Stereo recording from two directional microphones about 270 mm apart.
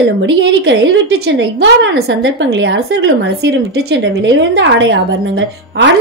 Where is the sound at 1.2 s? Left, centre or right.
Right.